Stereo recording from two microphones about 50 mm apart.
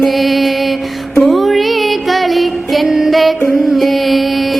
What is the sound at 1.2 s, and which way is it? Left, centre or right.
Music, centre.